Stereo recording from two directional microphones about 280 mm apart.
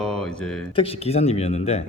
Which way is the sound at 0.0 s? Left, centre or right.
Centre.